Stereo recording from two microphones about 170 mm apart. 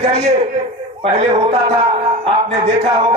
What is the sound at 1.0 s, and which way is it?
Speech, 35° right (ahead or behind).